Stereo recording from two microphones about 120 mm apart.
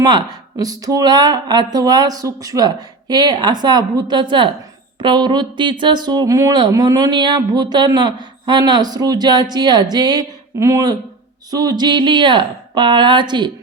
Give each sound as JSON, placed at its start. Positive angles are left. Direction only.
{"t": 0.0, "sound": "speech", "side_deg": -35}